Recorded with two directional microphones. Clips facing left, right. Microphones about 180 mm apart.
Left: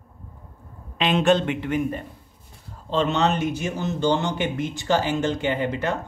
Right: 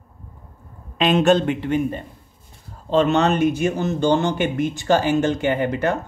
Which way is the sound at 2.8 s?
50° right (ahead or behind).